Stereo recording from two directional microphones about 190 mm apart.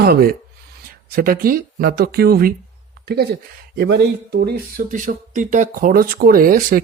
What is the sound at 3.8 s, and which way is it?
Speech, 60° right (ahead or behind).